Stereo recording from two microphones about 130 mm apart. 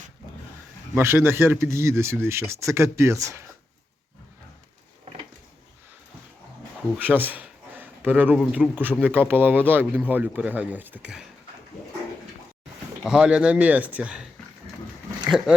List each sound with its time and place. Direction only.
0.9 s speech: 20° right (ahead or behind)
6.9 s a sound: 15° right (ahead or behind)
8.4 s speech: centre (ahead or behind)
8.7 s speech: 15° right (ahead or behind)
13.1 s speech: 5° right (ahead or behind)